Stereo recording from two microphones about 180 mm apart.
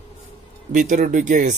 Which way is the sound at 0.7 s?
45° right (ahead or behind).